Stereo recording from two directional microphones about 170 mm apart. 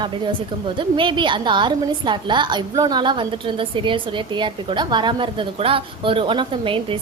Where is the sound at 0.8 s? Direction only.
30° right (ahead or behind).